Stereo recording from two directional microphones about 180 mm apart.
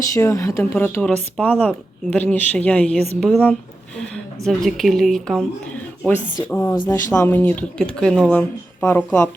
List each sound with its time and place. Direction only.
0.1 s speech: 15° left (ahead or behind)
6.5 s speech: 10° left (ahead or behind)